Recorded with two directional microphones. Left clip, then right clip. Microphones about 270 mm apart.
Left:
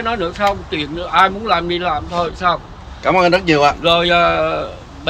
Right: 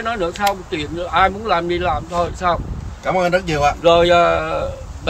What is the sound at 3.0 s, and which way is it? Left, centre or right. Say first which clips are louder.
Speech: left 4 dB; centre.